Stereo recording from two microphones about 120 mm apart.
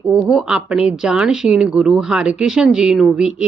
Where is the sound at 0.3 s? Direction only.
5° right (ahead or behind).